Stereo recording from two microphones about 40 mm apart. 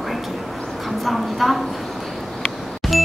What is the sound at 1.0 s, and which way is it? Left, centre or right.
Speech, centre.